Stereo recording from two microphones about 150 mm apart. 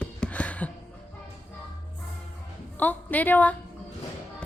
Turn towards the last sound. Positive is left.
turn(degrees=10)  # may be behind; listen again after turning